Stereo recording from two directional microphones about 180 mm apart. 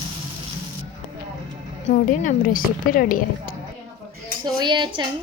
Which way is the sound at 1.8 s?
45° left (ahead or behind).